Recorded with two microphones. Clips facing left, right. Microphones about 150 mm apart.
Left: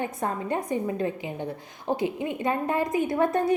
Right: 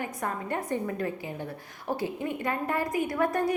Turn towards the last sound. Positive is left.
turn(degrees=25)  # may be behind; listen again after turning